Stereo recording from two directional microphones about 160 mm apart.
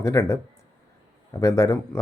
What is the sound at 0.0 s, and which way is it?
Speech, 20° left (ahead or behind).